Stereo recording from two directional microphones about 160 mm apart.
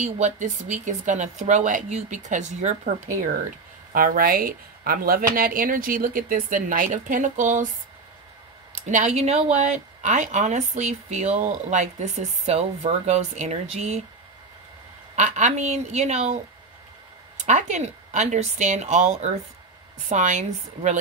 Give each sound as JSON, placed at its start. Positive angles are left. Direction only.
{"t": 0.0, "sound": "speech", "side_deg": -45}
{"t": 8.7, "sound": "speech", "side_deg": -50}
{"t": 15.1, "sound": "speech", "side_deg": -50}
{"t": 17.4, "sound": "speech", "side_deg": -50}